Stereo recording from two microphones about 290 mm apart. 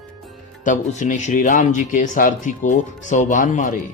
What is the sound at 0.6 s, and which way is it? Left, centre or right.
Speech, left.